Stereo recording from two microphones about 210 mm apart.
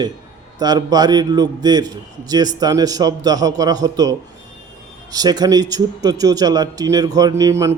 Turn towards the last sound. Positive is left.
turn(degrees=-15)  # may be behind; listen again after turning